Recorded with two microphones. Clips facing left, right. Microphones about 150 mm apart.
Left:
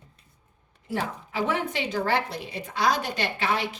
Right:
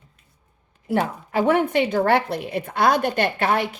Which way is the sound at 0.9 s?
55° right (ahead or behind).